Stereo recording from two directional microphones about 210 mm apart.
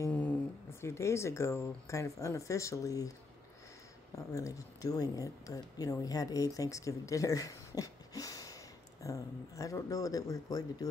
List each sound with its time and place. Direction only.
0.0 s speech: 10° left (ahead or behind)
4.3 s speech: 15° left (ahead or behind)